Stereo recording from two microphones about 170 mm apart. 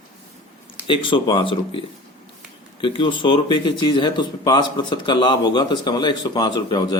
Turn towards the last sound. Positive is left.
turn(degrees=25)  # may be behind; listen again after turning